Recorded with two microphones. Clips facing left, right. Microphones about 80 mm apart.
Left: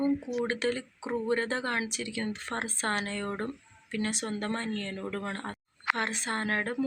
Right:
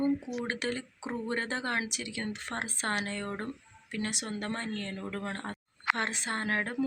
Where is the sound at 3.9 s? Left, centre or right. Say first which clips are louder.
Left 3 dB; centre.